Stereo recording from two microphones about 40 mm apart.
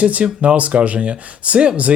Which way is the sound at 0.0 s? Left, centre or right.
Right.